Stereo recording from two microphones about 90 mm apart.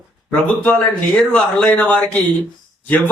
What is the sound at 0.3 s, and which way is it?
A man's voice, 10° left (ahead or behind).